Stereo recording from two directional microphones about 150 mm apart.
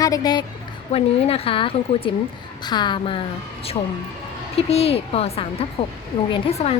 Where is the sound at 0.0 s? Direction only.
25° left (ahead or behind).